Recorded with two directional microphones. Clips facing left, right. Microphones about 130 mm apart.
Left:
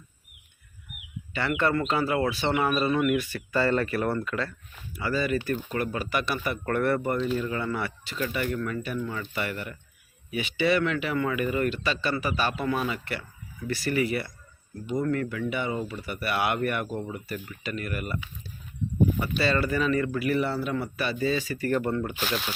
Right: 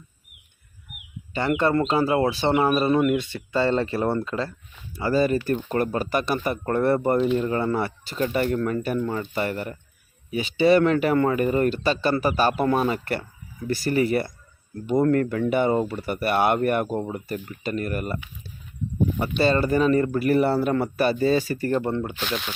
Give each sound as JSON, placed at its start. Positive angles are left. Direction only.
{"t": 1.3, "sound": "speech", "side_deg": -40}
{"t": 6.7, "sound": "speech", "side_deg": -30}
{"t": 19.4, "sound": "speech", "side_deg": -40}
{"t": 21.7, "sound": "speech", "side_deg": -25}
{"t": 22.1, "sound": "speech", "side_deg": 5}